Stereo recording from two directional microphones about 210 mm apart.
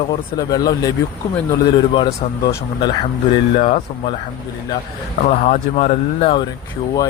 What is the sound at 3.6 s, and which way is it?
Speech, 35° left (ahead or behind).